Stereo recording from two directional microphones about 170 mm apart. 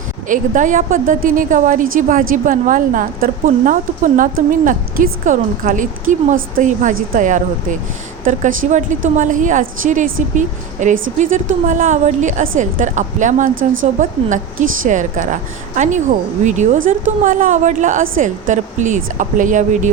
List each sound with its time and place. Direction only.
0.3 s a woman's voice: 50° right (ahead or behind)